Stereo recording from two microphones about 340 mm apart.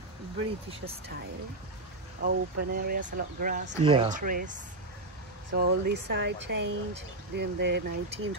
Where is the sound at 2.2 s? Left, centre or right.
Right.